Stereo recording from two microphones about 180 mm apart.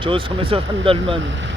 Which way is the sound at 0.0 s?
30° right (ahead or behind).